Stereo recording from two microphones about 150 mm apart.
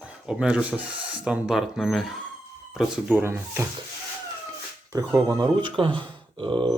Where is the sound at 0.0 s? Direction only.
5° right (ahead or behind).